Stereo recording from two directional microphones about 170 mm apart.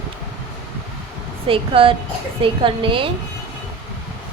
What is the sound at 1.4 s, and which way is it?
A woman's voice, 30° right (ahead or behind).